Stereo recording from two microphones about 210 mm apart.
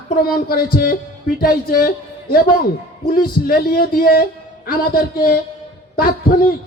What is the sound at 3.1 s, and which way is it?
A man's voice, 45° left (ahead or behind).